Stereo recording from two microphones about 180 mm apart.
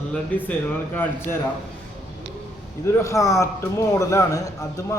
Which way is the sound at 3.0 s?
15° left (ahead or behind).